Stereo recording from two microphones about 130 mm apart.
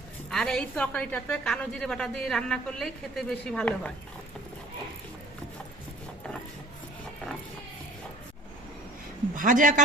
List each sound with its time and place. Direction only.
0.3 s a woman's voice: 5° left (ahead or behind)
9.3 s speech: 90° right